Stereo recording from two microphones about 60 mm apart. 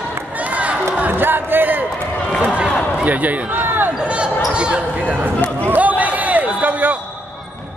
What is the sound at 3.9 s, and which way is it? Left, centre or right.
Basketball bounce, centre.